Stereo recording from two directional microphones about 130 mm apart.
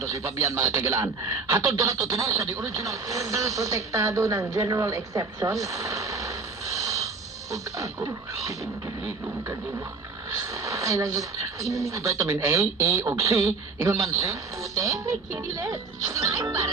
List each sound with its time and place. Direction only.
0.1 s speech: 25° right (ahead or behind)